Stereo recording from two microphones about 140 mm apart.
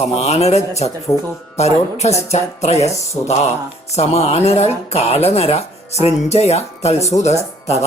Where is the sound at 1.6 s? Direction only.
50° left (ahead or behind).